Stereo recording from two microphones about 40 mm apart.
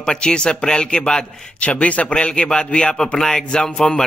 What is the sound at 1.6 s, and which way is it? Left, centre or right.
A man's voice, left.